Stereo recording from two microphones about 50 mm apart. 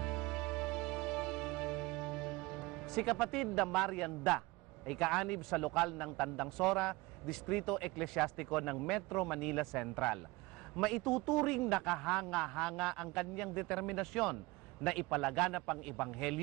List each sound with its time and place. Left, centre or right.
0.0 s music: centre
4.8 s a man's voice: centre